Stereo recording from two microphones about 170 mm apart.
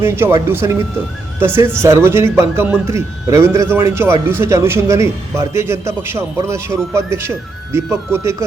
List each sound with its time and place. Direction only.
0.0 s speech: 15° right (ahead or behind)